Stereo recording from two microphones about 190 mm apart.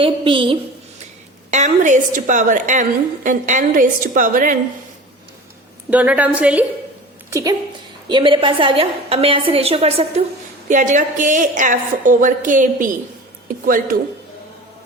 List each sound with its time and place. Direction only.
0.0 s a woman's voice: 25° right (ahead or behind)
1.5 s a woman's voice: 40° right (ahead or behind)
5.9 s a woman's voice: 10° right (ahead or behind); by 13.9 s 45° right (ahead or behind)